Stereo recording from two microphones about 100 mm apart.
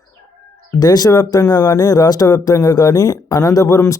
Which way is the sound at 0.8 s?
40° left (ahead or behind).